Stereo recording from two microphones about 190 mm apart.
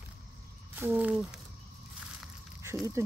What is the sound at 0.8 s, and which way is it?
Speech, 10° right (ahead or behind).